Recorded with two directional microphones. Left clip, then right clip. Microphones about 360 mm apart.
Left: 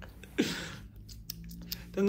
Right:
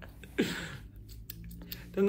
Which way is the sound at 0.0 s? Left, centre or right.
Centre.